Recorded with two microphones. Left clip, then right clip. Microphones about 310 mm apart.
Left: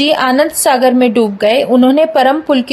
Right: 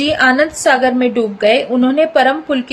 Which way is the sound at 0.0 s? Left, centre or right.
Centre.